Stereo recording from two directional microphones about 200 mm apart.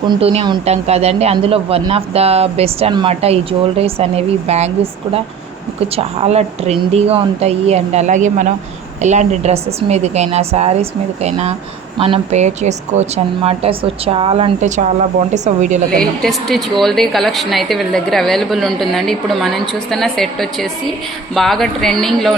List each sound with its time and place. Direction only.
0.0 s speech: 25° right (ahead or behind)
16.0 s a woman's voice: centre (ahead or behind)